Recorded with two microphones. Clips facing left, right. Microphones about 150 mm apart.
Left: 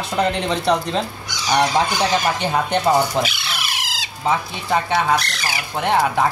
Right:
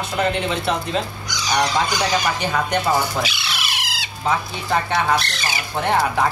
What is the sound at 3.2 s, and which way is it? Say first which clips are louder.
Bird: left 1 dB; 45° left (ahead or behind).